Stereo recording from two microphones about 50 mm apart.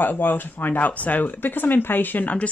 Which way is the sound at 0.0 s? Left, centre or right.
Left.